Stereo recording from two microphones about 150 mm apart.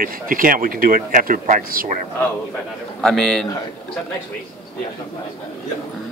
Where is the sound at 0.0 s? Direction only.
70° right (ahead or behind).